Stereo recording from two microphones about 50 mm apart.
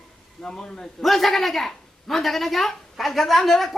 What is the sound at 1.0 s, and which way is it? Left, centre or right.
A man's voice, centre.